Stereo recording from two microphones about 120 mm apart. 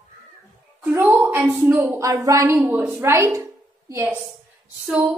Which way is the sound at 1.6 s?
25° right (ahead or behind).